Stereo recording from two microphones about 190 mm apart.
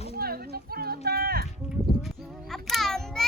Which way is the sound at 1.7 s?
Centre (ahead or behind).